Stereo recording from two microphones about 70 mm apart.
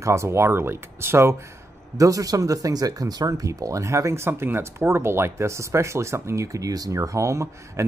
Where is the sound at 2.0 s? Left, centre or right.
Right.